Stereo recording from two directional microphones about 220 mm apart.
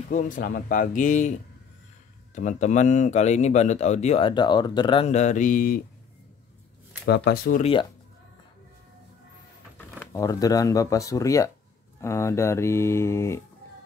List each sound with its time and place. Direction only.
0.1 s speech: 35° left (ahead or behind)
7.1 s speech: 45° left (ahead or behind)
9.9 s speech: 15° left (ahead or behind)